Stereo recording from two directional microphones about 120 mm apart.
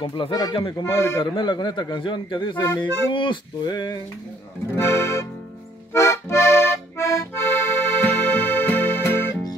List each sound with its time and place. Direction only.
0.0 s a man's voice: 45° left (ahead or behind)
0.9 s music: 25° left (ahead or behind)
1.2 s a man's voice: 40° left (ahead or behind)
4.7 s music: 20° left (ahead or behind)
5.9 s accordion: 25° left (ahead or behind)